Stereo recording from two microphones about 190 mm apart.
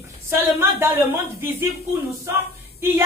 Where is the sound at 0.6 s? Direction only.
10° right (ahead or behind).